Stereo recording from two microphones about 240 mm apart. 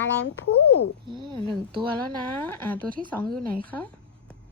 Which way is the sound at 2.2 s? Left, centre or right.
Centre.